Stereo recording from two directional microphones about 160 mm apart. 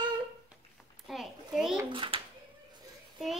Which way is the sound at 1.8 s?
30° right (ahead or behind).